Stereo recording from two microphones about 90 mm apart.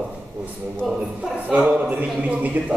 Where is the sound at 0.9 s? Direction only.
15° right (ahead or behind).